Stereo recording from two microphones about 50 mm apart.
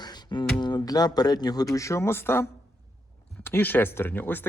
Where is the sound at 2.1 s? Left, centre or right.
Left.